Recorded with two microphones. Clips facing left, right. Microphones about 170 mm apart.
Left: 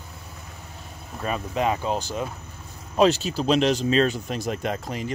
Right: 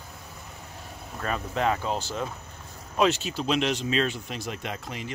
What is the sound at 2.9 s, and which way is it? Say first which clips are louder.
Speech: left 5 dB; 35° left (ahead or behind).